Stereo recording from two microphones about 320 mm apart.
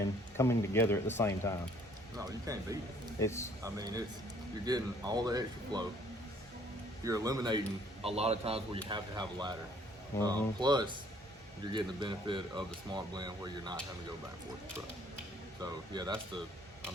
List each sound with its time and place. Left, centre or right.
0.3 s speech: centre
2.1 s speech: centre
3.2 s speech: centre
3.6 s speech: centre
7.0 s speech: centre
10.1 s speech: centre
10.6 s speech: centre
15.6 s speech: centre